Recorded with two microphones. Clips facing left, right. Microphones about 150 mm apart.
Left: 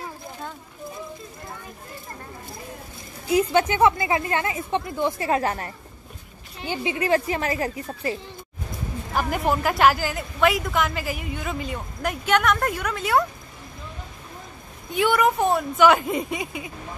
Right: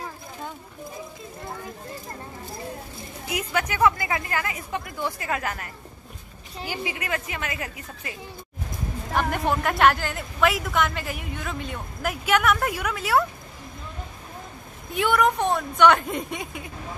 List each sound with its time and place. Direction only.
3.3 s speech: 30° left (ahead or behind)
6.7 s speech: 25° left (ahead or behind)
9.1 s a woman's voice: 5° left (ahead or behind)
14.9 s a woman's voice: centre (ahead or behind)